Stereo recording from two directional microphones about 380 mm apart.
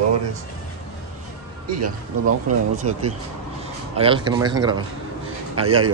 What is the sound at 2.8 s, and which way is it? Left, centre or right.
A man's voice, centre.